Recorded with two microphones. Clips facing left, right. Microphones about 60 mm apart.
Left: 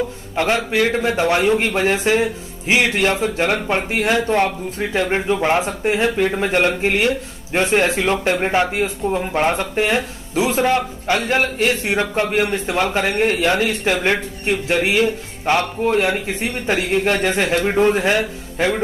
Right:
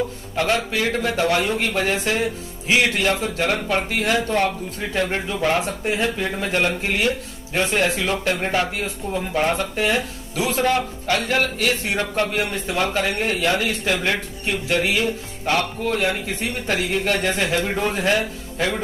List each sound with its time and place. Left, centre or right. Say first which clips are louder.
0.4 s speech: left 4 dB; left